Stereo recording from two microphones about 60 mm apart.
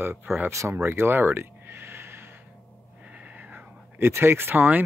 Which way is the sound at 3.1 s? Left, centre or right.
Right.